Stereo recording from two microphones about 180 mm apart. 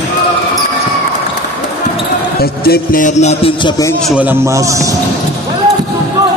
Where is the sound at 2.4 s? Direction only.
55° left (ahead or behind); by 3.5 s 40° left (ahead or behind).